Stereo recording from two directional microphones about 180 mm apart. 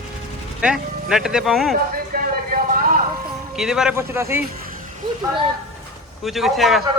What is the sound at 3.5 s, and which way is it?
Speech, 5° right (ahead or behind).